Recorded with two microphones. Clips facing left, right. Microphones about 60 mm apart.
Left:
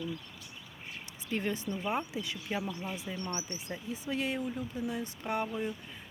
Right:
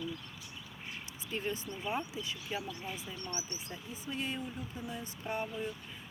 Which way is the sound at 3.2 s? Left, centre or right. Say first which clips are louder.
Left 4 dB; left.